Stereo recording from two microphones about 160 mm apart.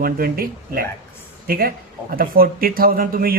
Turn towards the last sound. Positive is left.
turn(degrees=-65)  # may be behind; listen again after turning